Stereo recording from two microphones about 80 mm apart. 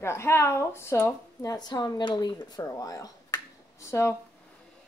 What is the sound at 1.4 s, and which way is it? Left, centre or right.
A woman's voice, left.